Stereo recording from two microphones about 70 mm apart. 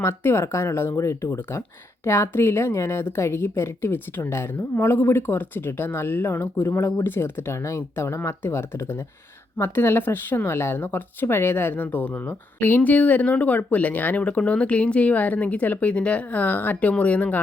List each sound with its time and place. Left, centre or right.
0.0 s speech: left